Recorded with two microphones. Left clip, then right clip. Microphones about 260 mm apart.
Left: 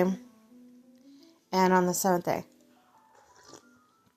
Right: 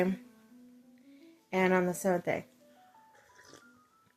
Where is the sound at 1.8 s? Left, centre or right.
Left.